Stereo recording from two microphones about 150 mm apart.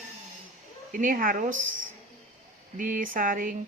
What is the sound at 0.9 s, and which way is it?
Speech, 65° right (ahead or behind).